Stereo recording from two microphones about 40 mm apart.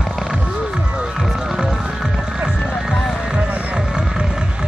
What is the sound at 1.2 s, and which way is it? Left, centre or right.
Music, centre.